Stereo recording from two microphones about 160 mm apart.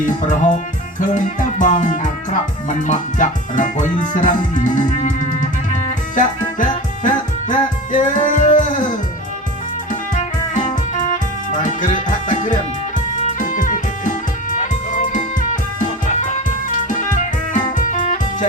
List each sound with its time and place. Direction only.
0.0 s music: 50° left (ahead or behind)
10.5 s music: 50° left (ahead or behind)